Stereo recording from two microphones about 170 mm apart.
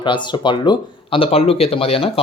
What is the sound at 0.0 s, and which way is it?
Speech, 25° left (ahead or behind).